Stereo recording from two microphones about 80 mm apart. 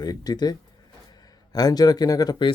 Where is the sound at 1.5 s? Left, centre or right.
Left.